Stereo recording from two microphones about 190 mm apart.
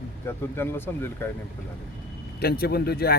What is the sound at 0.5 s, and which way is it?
Speech, 10° left (ahead or behind).